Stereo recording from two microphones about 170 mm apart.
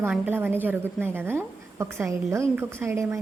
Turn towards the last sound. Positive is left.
turn(degrees=-15)  # may be behind; listen again after turning